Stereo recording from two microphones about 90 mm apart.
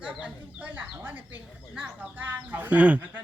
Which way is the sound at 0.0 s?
15° right (ahead or behind).